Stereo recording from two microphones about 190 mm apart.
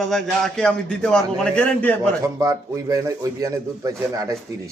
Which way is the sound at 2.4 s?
20° right (ahead or behind).